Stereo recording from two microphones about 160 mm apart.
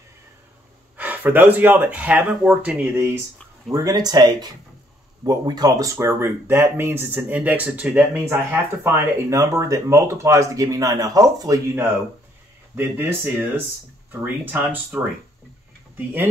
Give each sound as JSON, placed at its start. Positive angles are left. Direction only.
{"t": 0.9, "sound": "speech", "side_deg": -10}
{"t": 3.8, "sound": "speech", "side_deg": -25}